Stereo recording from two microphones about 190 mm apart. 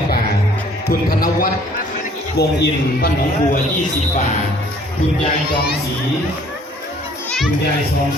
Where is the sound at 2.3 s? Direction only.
55° left (ahead or behind).